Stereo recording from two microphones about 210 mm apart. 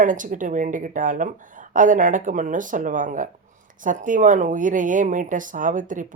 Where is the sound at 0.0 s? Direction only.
40° right (ahead or behind).